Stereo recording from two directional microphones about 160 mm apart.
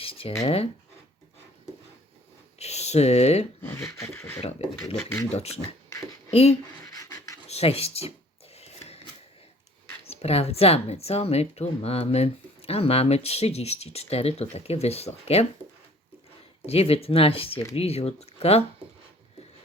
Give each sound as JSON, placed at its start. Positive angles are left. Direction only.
{"t": 0.0, "sound": "a sound", "side_deg": 35}
{"t": 0.4, "sound": "speech", "side_deg": 35}
{"t": 2.6, "sound": "a sound", "side_deg": 40}
{"t": 4.0, "sound": "speech", "side_deg": 15}
{"t": 4.6, "sound": "speech", "side_deg": 40}
{"t": 6.9, "sound": "pant", "side_deg": 20}
{"t": 7.4, "sound": "speech", "side_deg": 40}
{"t": 8.5, "sound": "a sound", "side_deg": 40}
{"t": 10.1, "sound": "speech", "side_deg": 40}
{"t": 16.6, "sound": "speech", "side_deg": 40}